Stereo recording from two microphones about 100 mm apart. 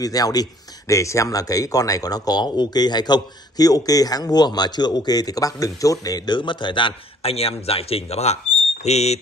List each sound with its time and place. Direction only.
0.0 s speech: 40° left (ahead or behind); by 9.2 s 90° left